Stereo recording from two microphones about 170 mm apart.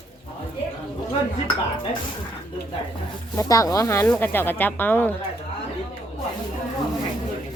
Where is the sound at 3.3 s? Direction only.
20° left (ahead or behind).